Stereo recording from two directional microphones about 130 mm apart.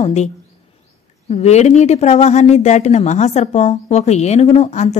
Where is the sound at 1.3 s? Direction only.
55° left (ahead or behind).